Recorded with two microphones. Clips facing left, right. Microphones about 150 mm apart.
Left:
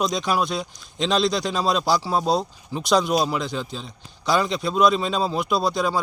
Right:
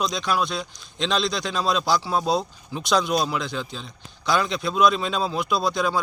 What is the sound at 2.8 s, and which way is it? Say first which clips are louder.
Speech: left 2 dB; 35° left (ahead or behind).